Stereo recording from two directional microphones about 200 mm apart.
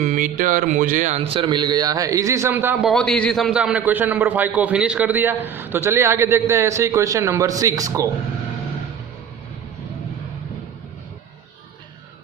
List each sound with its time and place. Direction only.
0.0 s a man's voice: 40° right (ahead or behind); by 2.9 s 10° right (ahead or behind)
2.9 s a man's voice: 5° left (ahead or behind); by 8.1 s 15° right (ahead or behind)